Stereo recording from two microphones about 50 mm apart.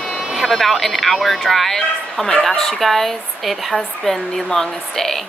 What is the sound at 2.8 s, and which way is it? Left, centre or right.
A woman's voice, centre.